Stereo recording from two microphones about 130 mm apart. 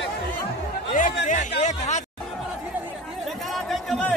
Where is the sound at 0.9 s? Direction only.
80° left; by 2.0 s 65° left (ahead or behind).